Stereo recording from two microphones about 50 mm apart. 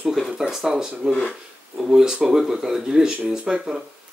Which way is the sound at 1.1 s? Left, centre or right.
Centre.